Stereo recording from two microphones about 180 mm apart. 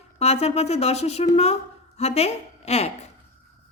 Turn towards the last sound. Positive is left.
turn(degrees=35)  # may be behind; listen again after turning